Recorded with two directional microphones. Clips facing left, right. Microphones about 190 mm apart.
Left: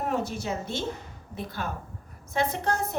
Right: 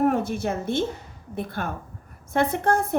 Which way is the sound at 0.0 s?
55° right (ahead or behind).